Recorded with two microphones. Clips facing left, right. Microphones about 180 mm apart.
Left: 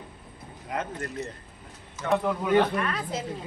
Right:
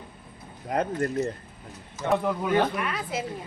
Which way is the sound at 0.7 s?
35° right (ahead or behind).